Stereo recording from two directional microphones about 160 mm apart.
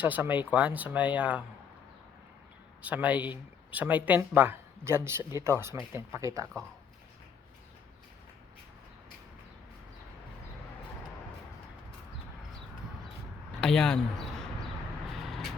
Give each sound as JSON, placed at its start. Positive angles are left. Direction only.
{"t": 0.0, "sound": "speech", "side_deg": -10}
{"t": 2.8, "sound": "speech", "side_deg": -10}
{"t": 13.6, "sound": "speech", "side_deg": 5}
{"t": 15.1, "sound": "vehicle", "side_deg": 0}